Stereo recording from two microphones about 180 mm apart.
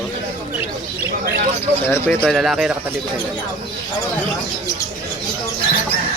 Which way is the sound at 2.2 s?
Centre (ahead or behind).